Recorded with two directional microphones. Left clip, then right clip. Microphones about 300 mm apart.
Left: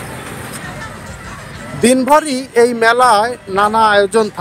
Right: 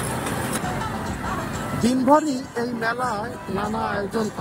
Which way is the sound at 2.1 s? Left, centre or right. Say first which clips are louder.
Left 6 dB; left.